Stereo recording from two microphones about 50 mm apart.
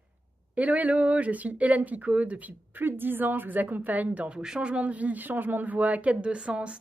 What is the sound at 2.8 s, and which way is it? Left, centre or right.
Speech, right.